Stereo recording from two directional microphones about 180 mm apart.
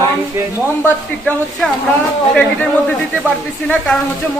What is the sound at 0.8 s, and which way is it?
Speech, 5° left (ahead or behind).